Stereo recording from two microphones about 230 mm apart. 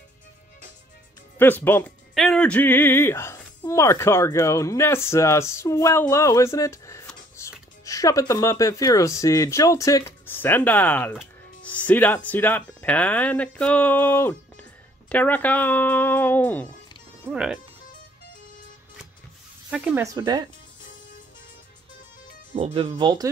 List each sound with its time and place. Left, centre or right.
1.4 s speech: centre
17.3 s speech: centre
19.7 s speech: centre
22.6 s speech: right